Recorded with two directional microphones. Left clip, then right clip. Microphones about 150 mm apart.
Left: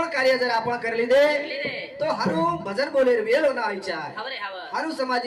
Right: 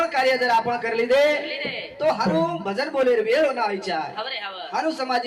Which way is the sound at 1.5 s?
40° left (ahead or behind).